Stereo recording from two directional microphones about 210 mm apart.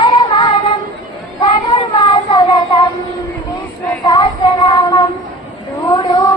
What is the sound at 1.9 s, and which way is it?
Child singing, 20° left (ahead or behind).